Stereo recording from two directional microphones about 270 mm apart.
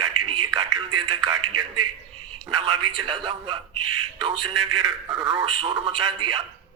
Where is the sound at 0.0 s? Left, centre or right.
Centre.